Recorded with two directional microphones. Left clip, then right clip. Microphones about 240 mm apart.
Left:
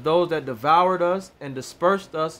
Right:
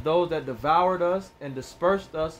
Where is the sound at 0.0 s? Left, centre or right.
Left.